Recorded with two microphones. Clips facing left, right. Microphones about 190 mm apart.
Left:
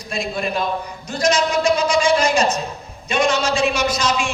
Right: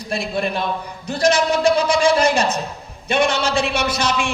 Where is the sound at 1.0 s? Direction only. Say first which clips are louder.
Right 2 dB; 60° right (ahead or behind).